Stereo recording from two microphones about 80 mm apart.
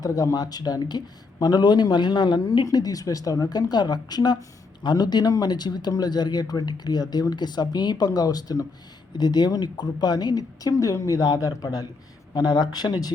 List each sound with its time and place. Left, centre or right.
0.0 s speech: left
2.6 s speech: left
12.3 s speech: left